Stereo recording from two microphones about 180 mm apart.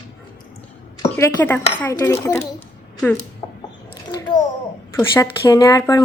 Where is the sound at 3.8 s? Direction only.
25° left (ahead or behind).